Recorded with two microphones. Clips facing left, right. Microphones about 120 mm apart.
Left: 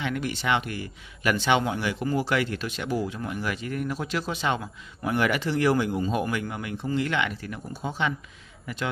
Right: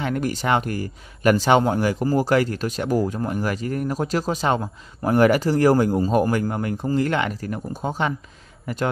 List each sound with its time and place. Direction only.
0.0 s a man's voice: 40° right (ahead or behind)